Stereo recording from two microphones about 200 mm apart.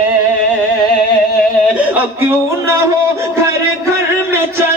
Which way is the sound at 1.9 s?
10° right (ahead or behind).